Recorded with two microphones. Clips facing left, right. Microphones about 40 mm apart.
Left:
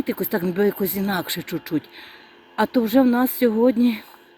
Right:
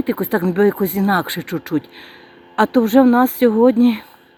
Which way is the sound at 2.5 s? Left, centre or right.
Right.